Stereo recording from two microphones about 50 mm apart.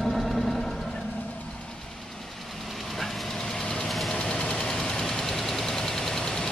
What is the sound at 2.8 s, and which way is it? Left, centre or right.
Vehicle, centre.